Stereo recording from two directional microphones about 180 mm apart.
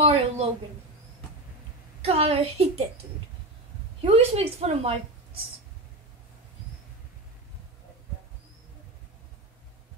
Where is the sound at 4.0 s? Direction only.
35° right (ahead or behind).